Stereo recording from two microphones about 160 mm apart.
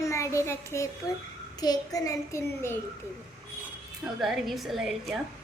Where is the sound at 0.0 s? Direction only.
20° left (ahead or behind).